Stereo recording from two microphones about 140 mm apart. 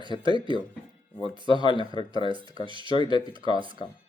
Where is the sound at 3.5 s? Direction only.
35° right (ahead or behind).